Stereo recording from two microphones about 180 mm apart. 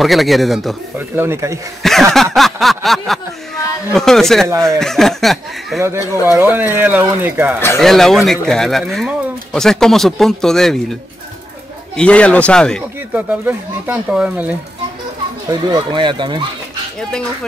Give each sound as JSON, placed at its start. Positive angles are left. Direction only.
{"t": 0.0, "sound": "speech", "side_deg": 0}
{"t": 1.1, "sound": "speech", "side_deg": -15}
{"t": 1.8, "sound": "snicker", "side_deg": 0}
{"t": 2.3, "sound": "a sound", "side_deg": 0}
{"t": 3.9, "sound": "speech", "side_deg": 0}
{"t": 5.8, "sound": "speech", "side_deg": -15}
{"t": 7.8, "sound": "speech", "side_deg": 0}
{"t": 12.0, "sound": "speech", "side_deg": 5}
{"t": 13.1, "sound": "speech", "side_deg": -10}
{"t": 15.7, "sound": "speech", "side_deg": -25}